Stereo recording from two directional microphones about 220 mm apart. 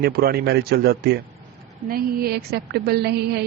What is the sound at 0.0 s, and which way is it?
A woman's voice, 50° right (ahead or behind).